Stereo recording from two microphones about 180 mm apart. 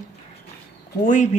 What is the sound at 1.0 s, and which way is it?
Speech, 45° left (ahead or behind).